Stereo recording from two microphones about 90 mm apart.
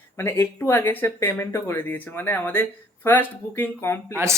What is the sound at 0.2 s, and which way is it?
Speech, 30° left (ahead or behind).